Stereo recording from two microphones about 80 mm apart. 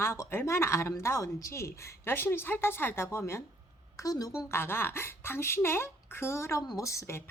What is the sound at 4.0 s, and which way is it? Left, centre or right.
Speech, left.